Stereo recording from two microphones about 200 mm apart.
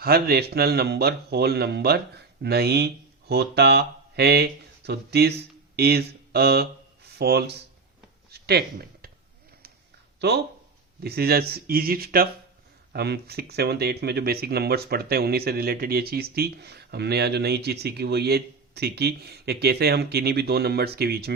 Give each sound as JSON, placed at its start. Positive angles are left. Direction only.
{"t": 0.0, "sound": "a man's voice", "side_deg": -50}
{"t": 8.3, "sound": "a sound", "side_deg": -50}
{"t": 10.2, "sound": "speech", "side_deg": -55}